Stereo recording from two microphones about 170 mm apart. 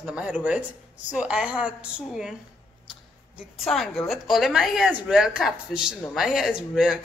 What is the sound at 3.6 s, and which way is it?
A woman's voice, centre (ahead or behind).